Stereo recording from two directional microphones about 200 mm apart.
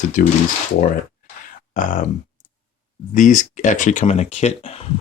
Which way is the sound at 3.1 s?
40° left (ahead or behind).